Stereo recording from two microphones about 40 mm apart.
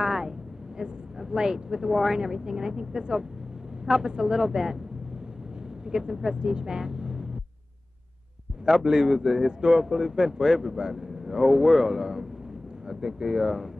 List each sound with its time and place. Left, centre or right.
0.0 s a sound: centre
0.7 s speech: centre
5.9 s speech: centre
8.6 s a man's voice: centre